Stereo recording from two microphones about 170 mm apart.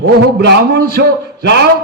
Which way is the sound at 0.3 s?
75° right (ahead or behind).